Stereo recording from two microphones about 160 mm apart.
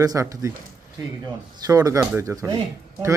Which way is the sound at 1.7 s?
20° right (ahead or behind).